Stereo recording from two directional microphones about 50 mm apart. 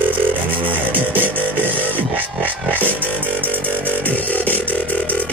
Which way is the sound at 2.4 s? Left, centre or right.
Right.